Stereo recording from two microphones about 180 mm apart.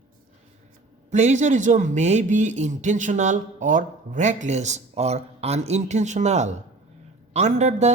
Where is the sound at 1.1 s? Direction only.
40° right (ahead or behind).